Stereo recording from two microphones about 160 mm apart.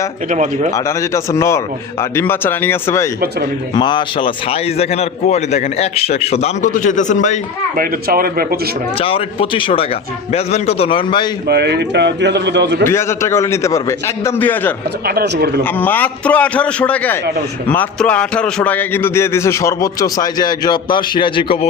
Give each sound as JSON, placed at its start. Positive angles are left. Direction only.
{"t": 0.3, "sound": "speech", "side_deg": -50}
{"t": 0.9, "sound": "a man's voice", "side_deg": 20}
{"t": 3.8, "sound": "a man's voice", "side_deg": 30}
{"t": 7.8, "sound": "a man's voice", "side_deg": -65}
{"t": 9.0, "sound": "a man's voice", "side_deg": 35}
{"t": 11.4, "sound": "a man's voice", "side_deg": -90}
{"t": 12.8, "sound": "a man's voice", "side_deg": 15}
{"t": 15.0, "sound": "speech", "side_deg": -80}
{"t": 15.6, "sound": "a man's voice", "side_deg": 10}